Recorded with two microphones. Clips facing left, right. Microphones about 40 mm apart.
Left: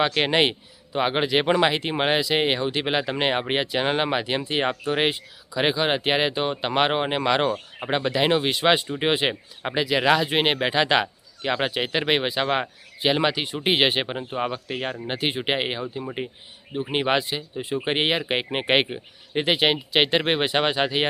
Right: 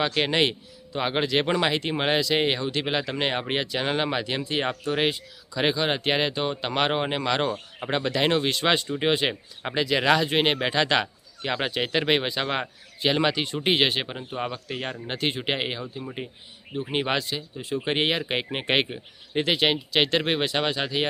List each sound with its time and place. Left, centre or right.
0.0 s speech: centre